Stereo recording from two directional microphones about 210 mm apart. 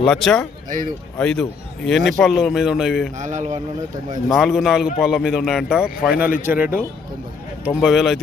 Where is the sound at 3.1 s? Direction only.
35° right (ahead or behind).